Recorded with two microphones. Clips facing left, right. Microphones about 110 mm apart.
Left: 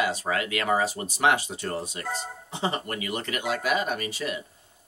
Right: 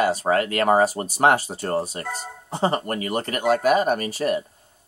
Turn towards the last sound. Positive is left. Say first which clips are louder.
# right 8 dB
turn(degrees=-45)  # may be behind; listen again after turning